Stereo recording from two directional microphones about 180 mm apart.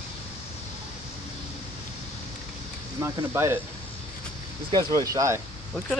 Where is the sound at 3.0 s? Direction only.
15° right (ahead or behind).